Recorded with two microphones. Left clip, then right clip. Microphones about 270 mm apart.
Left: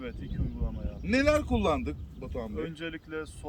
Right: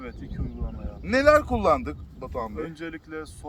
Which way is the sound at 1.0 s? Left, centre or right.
Centre.